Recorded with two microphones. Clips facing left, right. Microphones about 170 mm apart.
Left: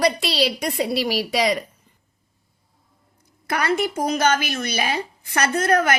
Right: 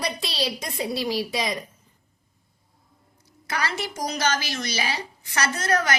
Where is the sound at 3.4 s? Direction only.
60° left (ahead or behind).